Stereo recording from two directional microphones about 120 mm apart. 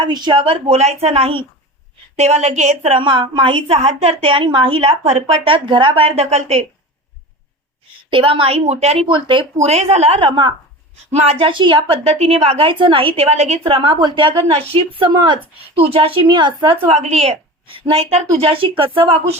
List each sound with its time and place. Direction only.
0.0 s a woman's voice: 40° right (ahead or behind)
2.1 s a woman's voice: 70° right (ahead or behind)
3.0 s a woman's voice: 45° right (ahead or behind); by 6.7 s 60° right (ahead or behind)
8.1 s a woman's voice: 50° right (ahead or behind)
9.6 s a woman's voice: 65° right (ahead or behind); by 10.5 s 45° right (ahead or behind)
11.1 s a woman's voice: 60° right (ahead or behind)
13.2 s a woman's voice: 65° right (ahead or behind); by 15.4 s 40° right (ahead or behind)
15.8 s a woman's voice: 55° right (ahead or behind)
16.2 s a woman's voice: 40° right (ahead or behind)
17.0 s a woman's voice: 65° right (ahead or behind); by 19.4 s 45° right (ahead or behind)